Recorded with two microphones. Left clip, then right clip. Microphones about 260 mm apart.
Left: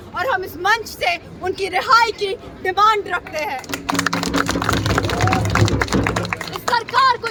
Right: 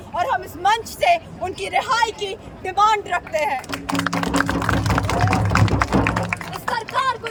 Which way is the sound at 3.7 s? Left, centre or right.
Left.